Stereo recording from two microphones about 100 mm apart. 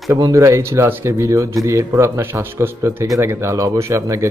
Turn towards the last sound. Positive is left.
turn(degrees=-30)  # may be behind; listen again after turning